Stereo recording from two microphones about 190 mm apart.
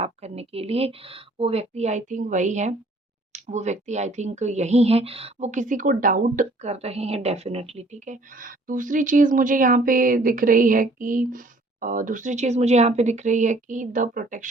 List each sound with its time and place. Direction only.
0.0 s speech: 30° right (ahead or behind)